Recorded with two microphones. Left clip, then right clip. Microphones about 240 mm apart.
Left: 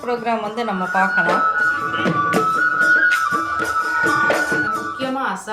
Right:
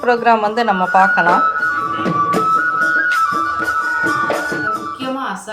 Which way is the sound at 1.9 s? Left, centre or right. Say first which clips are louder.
Right 2 dB; centre.